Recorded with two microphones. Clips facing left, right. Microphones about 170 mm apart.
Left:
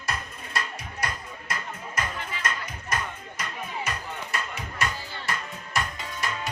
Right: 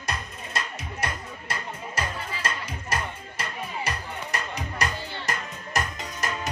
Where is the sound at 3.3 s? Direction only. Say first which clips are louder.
Right 1 dB; 35° right (ahead or behind).